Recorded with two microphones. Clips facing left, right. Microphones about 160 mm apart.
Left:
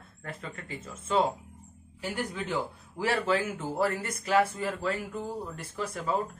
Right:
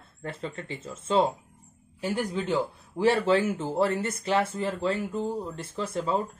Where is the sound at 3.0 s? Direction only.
30° right (ahead or behind).